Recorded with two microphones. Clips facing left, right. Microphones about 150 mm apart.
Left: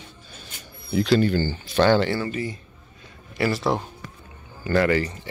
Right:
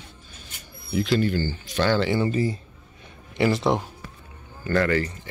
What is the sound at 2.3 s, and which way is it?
Speech, 35° right (ahead or behind).